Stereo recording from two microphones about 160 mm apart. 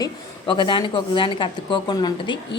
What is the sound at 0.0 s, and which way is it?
A woman's voice, 30° left (ahead or behind).